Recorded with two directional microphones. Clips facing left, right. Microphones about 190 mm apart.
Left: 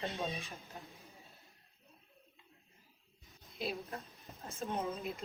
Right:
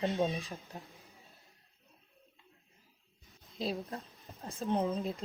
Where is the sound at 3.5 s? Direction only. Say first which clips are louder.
Right 4 dB; 35° right (ahead or behind).